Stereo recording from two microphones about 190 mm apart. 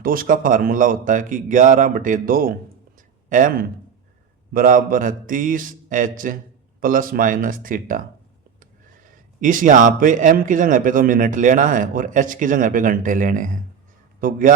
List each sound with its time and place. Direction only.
0.0 s a man's voice: 50° right (ahead or behind)
9.4 s a man's voice: 45° right (ahead or behind)